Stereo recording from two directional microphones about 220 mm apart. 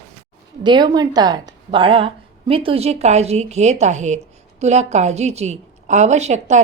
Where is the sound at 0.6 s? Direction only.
20° right (ahead or behind).